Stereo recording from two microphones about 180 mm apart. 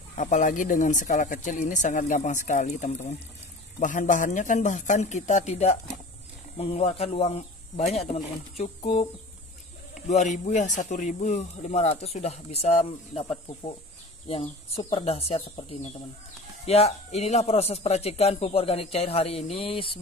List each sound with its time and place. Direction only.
0.2 s speech: 45° left (ahead or behind)
10.0 s speech: 40° left (ahead or behind)